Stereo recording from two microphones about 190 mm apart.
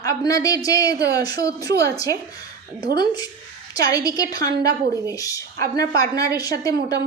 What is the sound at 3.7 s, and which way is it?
Speech, 20° left (ahead or behind).